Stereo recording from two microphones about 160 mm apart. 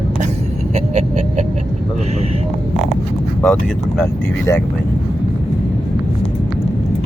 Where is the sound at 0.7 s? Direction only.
45° right (ahead or behind).